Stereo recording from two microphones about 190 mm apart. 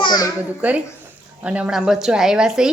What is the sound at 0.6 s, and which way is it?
A woman's voice, 5° right (ahead or behind).